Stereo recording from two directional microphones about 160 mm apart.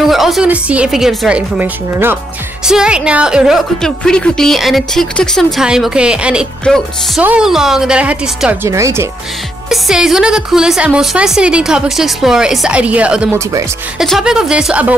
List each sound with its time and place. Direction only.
0.0 s a woman's voice: centre (ahead or behind)
6.7 s a woman's voice: 5° left (ahead or behind)
7.2 s a woman's voice: 5° right (ahead or behind)
8.6 s speech: 20° right (ahead or behind)
9.7 s a woman's voice: 5° right (ahead or behind)